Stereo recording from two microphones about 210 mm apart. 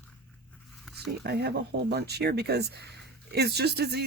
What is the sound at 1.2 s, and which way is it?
Speech, 50° right (ahead or behind).